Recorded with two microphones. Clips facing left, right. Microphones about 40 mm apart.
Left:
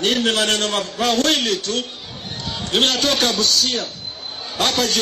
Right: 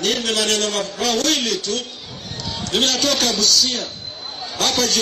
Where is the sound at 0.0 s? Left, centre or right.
Left.